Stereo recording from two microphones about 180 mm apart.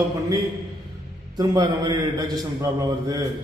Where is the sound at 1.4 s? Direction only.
20° right (ahead or behind).